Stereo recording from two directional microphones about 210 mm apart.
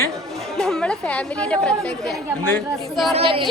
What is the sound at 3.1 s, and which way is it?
Speech, 25° right (ahead or behind).